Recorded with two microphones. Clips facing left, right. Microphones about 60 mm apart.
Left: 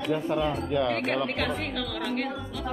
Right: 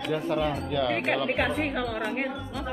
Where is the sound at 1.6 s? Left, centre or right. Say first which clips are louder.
Right 4 dB; right.